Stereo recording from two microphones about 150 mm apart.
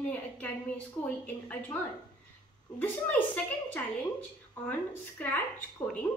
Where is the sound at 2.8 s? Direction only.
10° left (ahead or behind).